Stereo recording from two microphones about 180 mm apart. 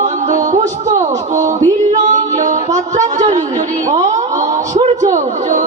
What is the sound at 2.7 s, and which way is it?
Speech, 40° right (ahead or behind).